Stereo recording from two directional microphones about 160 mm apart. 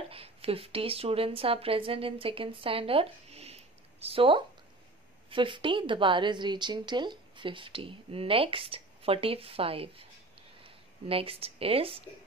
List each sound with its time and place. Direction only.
0.1 s a woman's voice: 35° right (ahead or behind)